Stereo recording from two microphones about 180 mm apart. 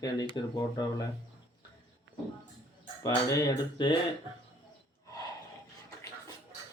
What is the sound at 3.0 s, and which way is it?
Speech, 20° left (ahead or behind).